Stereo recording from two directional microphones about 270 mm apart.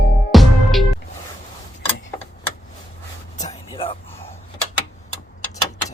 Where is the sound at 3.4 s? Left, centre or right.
Left.